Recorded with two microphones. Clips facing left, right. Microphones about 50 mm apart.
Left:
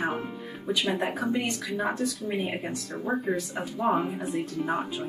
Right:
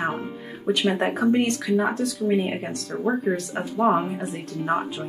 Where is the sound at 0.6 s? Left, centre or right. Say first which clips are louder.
Right 5 dB; right.